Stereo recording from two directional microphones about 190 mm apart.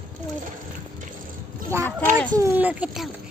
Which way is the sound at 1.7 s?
15° right (ahead or behind).